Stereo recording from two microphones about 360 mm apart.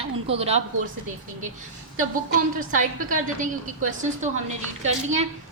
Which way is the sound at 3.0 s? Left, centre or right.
Right.